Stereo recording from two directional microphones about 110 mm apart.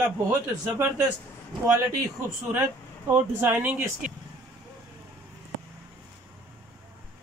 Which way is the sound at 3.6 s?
15° right (ahead or behind).